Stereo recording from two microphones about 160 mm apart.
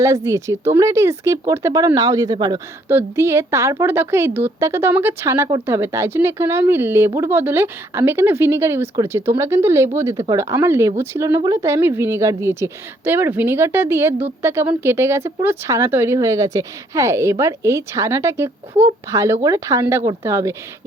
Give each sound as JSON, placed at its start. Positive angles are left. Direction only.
{"t": 0.0, "sound": "a woman's voice", "side_deg": -20}